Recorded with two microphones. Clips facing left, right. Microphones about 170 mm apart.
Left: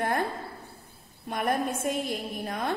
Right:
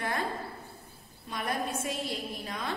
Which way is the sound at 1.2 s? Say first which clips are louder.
Left 6 dB; 55° left (ahead or behind).